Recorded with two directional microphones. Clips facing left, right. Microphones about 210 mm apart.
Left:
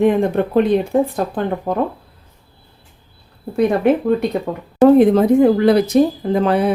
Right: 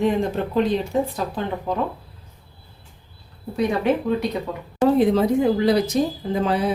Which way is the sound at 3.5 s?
55° left (ahead or behind).